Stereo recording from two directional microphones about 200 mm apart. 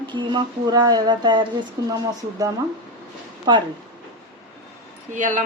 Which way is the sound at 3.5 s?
20° right (ahead or behind).